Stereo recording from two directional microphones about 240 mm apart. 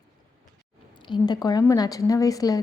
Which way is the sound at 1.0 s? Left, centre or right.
Centre.